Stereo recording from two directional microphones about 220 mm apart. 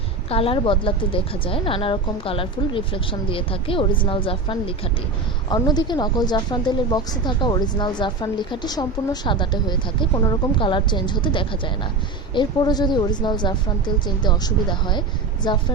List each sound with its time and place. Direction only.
0.3 s a woman's voice: 25° left (ahead or behind)